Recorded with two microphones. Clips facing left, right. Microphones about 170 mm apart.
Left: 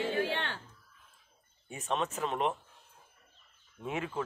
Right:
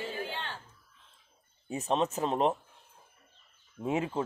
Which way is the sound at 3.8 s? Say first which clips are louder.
Right 5 dB; 30° right (ahead or behind).